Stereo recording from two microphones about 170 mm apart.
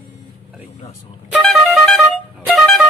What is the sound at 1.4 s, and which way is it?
Music, centre (ahead or behind).